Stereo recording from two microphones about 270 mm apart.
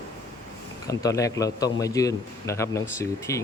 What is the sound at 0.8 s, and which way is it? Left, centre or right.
A man's voice, centre.